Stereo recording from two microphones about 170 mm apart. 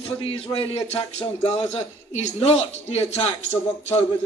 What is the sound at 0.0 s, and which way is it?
Speech, 35° left (ahead or behind).